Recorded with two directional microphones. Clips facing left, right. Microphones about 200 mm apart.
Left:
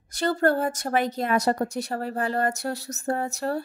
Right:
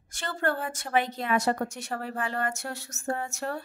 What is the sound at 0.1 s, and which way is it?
A woman's voice, 40° left (ahead or behind).